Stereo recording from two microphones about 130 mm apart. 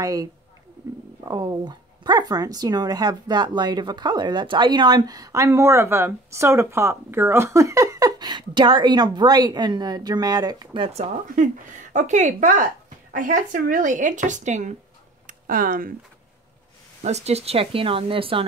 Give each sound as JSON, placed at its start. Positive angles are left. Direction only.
{"t": 0.0, "sound": "speech", "side_deg": -25}
{"t": 10.9, "sound": "a woman's voice", "side_deg": -65}
{"t": 13.1, "sound": "a woman's voice", "side_deg": -90}
{"t": 15.2, "sound": "speech", "side_deg": -90}
{"t": 17.0, "sound": "speech", "side_deg": -55}